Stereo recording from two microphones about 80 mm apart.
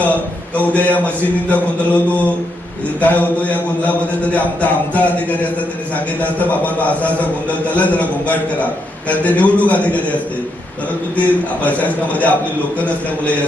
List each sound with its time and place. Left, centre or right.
0.7 s mantra: centre
3.0 s a sound: centre
7.7 s mantra: centre
11.2 s mantra: centre